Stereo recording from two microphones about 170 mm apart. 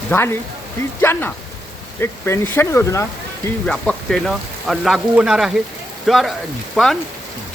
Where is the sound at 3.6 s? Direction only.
5° left (ahead or behind).